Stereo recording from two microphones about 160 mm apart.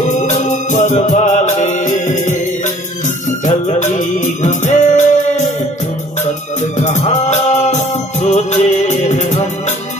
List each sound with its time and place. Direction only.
0.1 s music: 50° left (ahead or behind)
6.8 s music: 45° left (ahead or behind)